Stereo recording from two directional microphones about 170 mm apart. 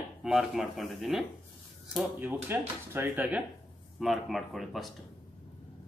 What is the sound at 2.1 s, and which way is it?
Speech, 10° right (ahead or behind).